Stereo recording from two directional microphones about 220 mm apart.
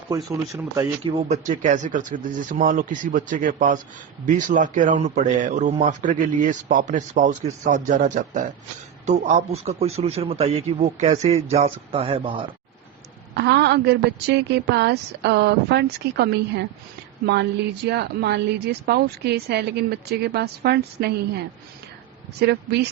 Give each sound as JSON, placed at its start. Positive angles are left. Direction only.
{"t": 0.1, "sound": "speech", "side_deg": -15}
{"t": 1.1, "sound": "a man's voice", "side_deg": -30}
{"t": 13.3, "sound": "a woman's voice", "side_deg": -50}
{"t": 17.8, "sound": "a woman's voice", "side_deg": -50}